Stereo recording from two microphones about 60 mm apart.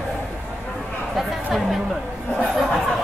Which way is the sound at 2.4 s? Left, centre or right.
Centre.